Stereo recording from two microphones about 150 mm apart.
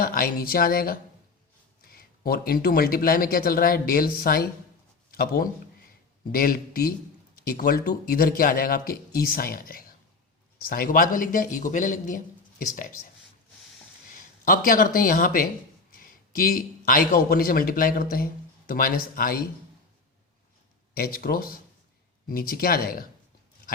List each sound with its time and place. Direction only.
0.0 s speech: 80° left
1.9 s a man's voice: 90° left; by 12.9 s 65° left (ahead or behind)
14.1 s a man's voice: 65° left (ahead or behind)
20.9 s speech: 80° left